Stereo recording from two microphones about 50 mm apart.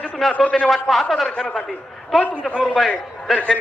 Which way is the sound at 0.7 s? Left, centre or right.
Centre.